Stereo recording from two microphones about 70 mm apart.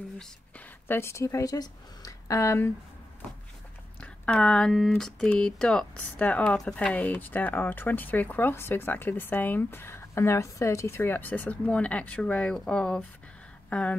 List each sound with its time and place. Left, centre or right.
0.8 s speech: left
1.1 s speech: left
1.5 s speech: left
4.0 s speech: centre
6.1 s speech: centre
6.9 s speech: left
11.0 s speech: left